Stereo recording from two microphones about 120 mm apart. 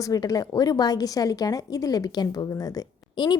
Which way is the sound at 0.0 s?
30° left (ahead or behind).